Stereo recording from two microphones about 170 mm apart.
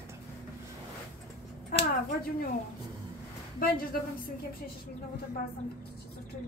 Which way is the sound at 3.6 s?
60° left (ahead or behind).